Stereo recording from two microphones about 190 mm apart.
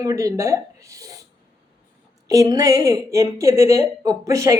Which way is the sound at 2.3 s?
20° right (ahead or behind).